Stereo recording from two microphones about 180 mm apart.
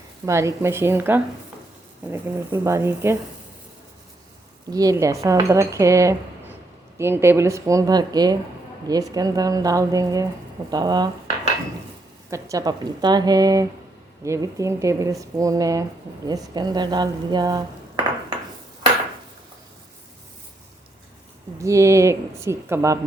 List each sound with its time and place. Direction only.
0.3 s speech: 15° right (ahead or behind)
4.7 s a woman's voice: 20° right (ahead or behind)
12.3 s a woman's voice: 20° right (ahead or behind)
21.6 s speech: 15° right (ahead or behind)